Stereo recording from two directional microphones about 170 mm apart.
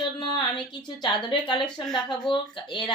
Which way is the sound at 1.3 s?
30° left (ahead or behind).